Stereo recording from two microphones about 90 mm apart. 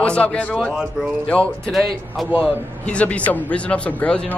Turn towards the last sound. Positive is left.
turn(degrees=15)  # may be behind; listen again after turning